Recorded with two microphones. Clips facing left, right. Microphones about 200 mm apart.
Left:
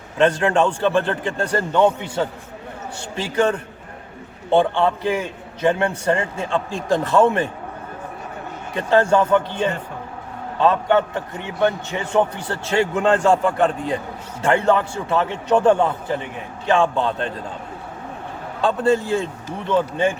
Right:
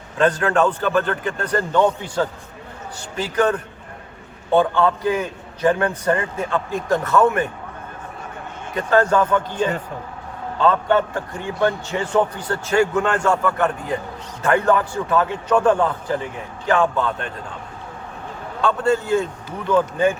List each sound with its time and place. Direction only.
0.2 s a man's voice: 25° left (ahead or behind)
8.7 s a man's voice: 25° left (ahead or behind)
18.6 s a man's voice: 30° left (ahead or behind)